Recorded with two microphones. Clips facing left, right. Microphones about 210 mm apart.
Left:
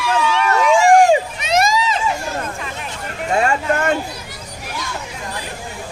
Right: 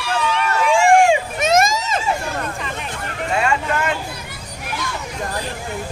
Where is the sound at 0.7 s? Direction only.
40° left (ahead or behind).